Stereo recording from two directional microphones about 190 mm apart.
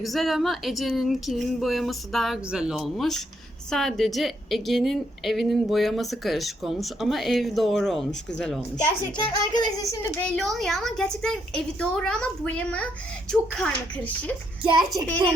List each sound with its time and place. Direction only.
0.0 s a woman's voice: centre (ahead or behind)
9.1 s a woman's voice: 20° left (ahead or behind)
9.9 s a woman's voice: 5° left (ahead or behind)
14.6 s a child's voice: 25° right (ahead or behind)